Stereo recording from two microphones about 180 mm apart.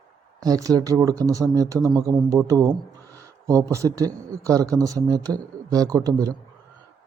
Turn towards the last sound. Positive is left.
turn(degrees=-20)  # may be behind; listen again after turning